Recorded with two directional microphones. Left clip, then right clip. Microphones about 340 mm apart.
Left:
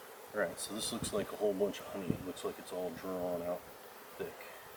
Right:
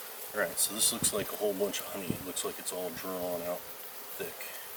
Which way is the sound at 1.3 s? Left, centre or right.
Left.